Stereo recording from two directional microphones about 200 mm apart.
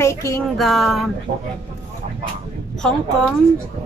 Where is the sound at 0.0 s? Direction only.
15° left (ahead or behind).